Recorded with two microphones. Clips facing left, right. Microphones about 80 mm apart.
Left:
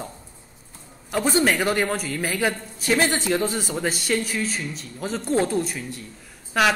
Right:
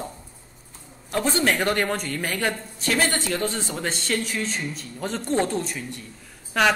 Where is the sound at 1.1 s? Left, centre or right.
Centre.